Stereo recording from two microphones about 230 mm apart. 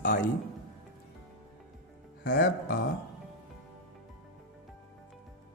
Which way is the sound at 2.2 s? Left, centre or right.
Left.